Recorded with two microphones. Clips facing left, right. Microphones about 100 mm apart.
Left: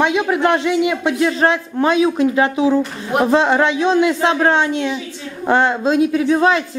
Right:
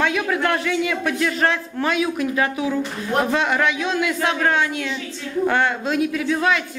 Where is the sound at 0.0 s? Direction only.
20° left (ahead or behind).